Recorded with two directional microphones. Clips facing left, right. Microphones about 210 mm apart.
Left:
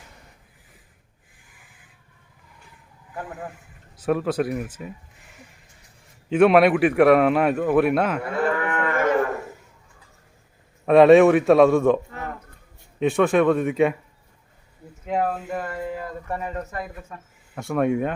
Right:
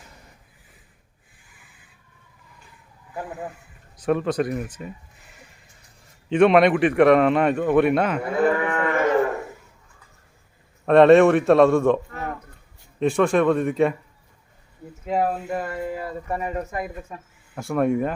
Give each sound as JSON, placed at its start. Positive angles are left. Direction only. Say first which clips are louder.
{"t": 3.9, "sound": "speech", "louder": "right 1 dB", "side_deg": 5}
{"t": 6.2, "sound": "a man's voice", "louder": "even", "side_deg": 5}
{"t": 8.3, "sound": "moo", "louder": "right 3 dB", "side_deg": -15}
{"t": 10.8, "sound": "a man's voice", "louder": "even", "side_deg": 5}
{"t": 13.0, "sound": "a man's voice", "louder": "even", "side_deg": 0}
{"t": 15.0, "sound": "speech", "louder": "right 1 dB", "side_deg": -5}
{"t": 17.5, "sound": "a man's voice", "louder": "even", "side_deg": 0}